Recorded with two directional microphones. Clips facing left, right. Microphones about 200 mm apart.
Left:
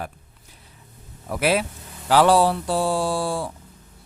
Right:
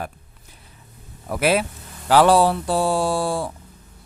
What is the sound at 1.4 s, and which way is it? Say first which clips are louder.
A man's voice: right 2 dB; 50° right (ahead or behind).